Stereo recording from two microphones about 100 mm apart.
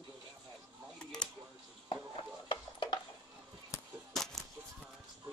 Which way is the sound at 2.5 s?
50° left (ahead or behind).